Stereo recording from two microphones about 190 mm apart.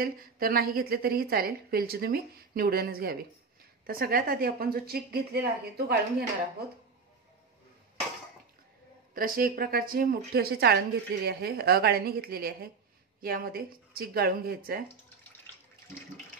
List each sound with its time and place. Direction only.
0.0 s a woman's voice: 50° right (ahead or behind)
9.1 s a woman's voice: 50° right (ahead or behind)